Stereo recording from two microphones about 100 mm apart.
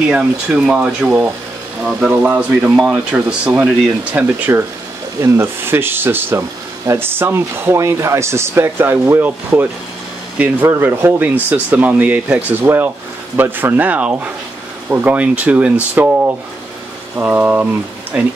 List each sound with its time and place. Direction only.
0.1 s speech: 10° right (ahead or behind)
2.7 s speech: 10° right (ahead or behind)
4.5 s speech: 25° right (ahead or behind)
10.3 s speech: 15° right (ahead or behind)
17.2 s speech: 20° right (ahead or behind)